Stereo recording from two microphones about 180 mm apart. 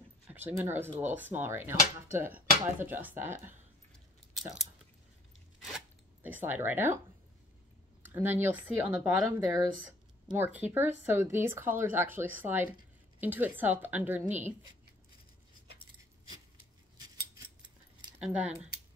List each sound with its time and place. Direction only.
0.3 s speech: 10° right (ahead or behind)
6.2 s speech: 10° right (ahead or behind)
8.1 s speech: 10° right (ahead or behind)
14.2 s speech: 40° right (ahead or behind)
18.2 s speech: 5° right (ahead or behind)